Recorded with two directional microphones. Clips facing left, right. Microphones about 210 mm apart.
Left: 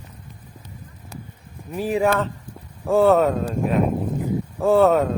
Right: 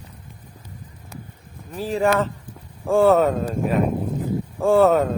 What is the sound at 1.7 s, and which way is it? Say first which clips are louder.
Speech: left 3 dB; 15° left (ahead or behind).